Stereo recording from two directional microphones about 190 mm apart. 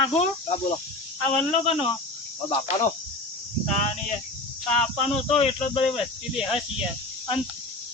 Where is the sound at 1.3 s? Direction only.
30° left (ahead or behind).